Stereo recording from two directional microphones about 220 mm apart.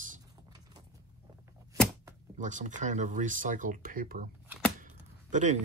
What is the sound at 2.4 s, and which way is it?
Speech, 35° right (ahead or behind).